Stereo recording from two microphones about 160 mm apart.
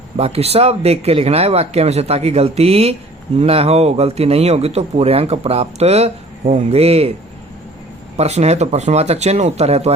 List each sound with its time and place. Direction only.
0.2 s speech: 40° right (ahead or behind)
8.1 s speech: 40° right (ahead or behind)